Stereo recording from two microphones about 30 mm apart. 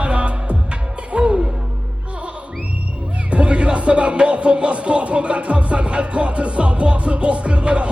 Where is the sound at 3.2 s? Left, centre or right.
Right.